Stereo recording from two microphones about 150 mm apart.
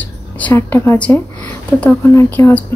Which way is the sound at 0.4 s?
15° left (ahead or behind).